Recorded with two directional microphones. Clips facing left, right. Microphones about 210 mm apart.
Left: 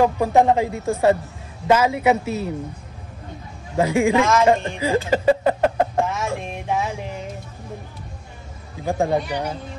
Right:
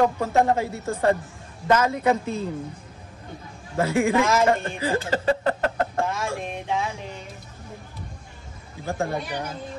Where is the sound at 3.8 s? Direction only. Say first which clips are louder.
Left 3 dB; 15° left (ahead or behind).